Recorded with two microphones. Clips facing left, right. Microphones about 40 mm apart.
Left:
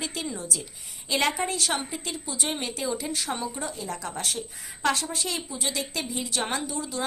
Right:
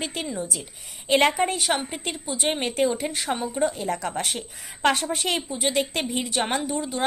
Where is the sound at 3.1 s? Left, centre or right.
Right.